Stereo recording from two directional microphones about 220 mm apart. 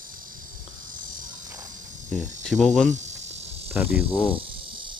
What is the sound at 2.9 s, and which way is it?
Insect, 30° right (ahead or behind).